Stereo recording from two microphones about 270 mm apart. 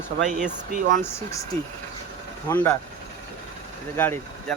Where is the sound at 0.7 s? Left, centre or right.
Right.